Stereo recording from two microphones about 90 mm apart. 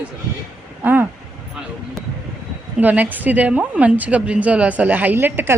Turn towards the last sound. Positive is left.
turn(degrees=-25)  # may be behind; listen again after turning